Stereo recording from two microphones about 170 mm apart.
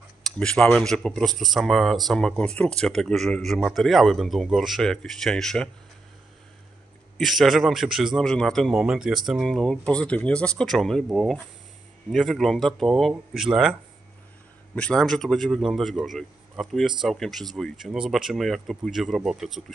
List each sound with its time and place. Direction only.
0.2 s a man's voice: 5° left (ahead or behind)
7.2 s a man's voice: centre (ahead or behind)
14.8 s a man's voice: 5° left (ahead or behind)